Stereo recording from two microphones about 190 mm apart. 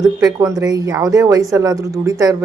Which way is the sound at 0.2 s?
20° right (ahead or behind).